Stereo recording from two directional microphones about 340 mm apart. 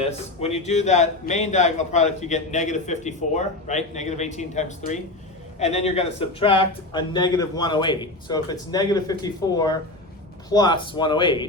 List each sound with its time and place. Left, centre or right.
0.0 s speech: centre